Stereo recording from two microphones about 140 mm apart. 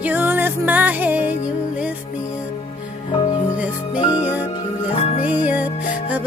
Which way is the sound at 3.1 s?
30° left (ahead or behind).